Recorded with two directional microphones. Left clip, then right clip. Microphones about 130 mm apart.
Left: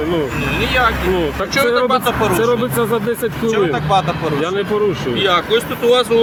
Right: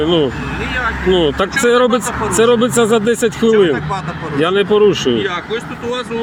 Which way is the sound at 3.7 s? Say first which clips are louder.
Left 5 dB; 10° left (ahead or behind).